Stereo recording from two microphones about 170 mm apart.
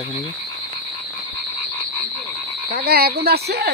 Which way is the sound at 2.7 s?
65° right (ahead or behind).